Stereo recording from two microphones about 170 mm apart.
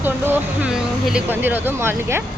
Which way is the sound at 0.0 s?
10° right (ahead or behind).